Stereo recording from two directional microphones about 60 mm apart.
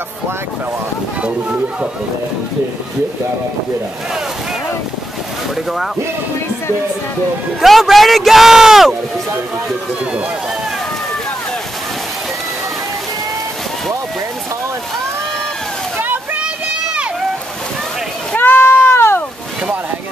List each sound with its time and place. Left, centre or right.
7.6 s a man's voice: centre
18.3 s goat: left